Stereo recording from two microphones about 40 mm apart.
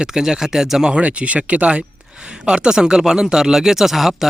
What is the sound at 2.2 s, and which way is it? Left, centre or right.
Speech, right.